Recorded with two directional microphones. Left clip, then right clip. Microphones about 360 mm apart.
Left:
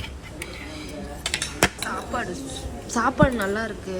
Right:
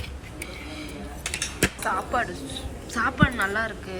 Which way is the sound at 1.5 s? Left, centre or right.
Centre.